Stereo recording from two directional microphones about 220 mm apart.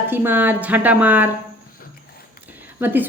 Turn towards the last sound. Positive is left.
turn(degrees=-10)  # may be behind; listen again after turning